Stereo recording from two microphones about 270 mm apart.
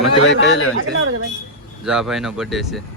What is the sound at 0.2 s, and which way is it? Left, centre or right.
Speech, left.